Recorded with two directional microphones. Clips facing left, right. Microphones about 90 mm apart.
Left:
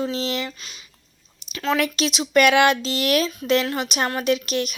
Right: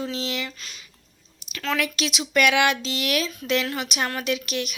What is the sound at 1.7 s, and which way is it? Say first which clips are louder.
Speech: left 3 dB; 35° left (ahead or behind).